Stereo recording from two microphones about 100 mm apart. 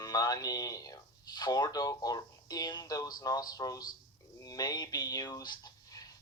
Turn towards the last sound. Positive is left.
turn(degrees=35)  # may be behind; listen again after turning